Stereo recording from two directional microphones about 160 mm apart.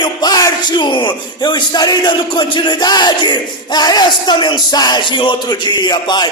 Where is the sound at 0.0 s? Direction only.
25° left (ahead or behind).